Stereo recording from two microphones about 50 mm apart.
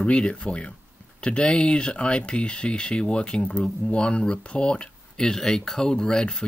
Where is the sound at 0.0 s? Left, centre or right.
Left.